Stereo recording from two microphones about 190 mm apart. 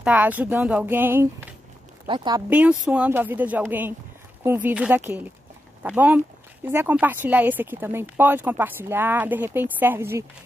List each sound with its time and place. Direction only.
0.0 s speech: 10° right (ahead or behind)
2.0 s speech: 25° right (ahead or behind)
2.5 s speech: 5° right (ahead or behind)